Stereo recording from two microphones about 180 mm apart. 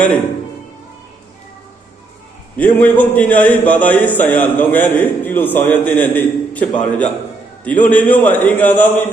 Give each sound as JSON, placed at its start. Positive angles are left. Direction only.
{"t": 2.6, "sound": "a man's voice", "side_deg": 10}